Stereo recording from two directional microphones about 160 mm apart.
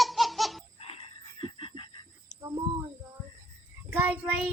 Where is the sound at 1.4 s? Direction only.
35° left (ahead or behind).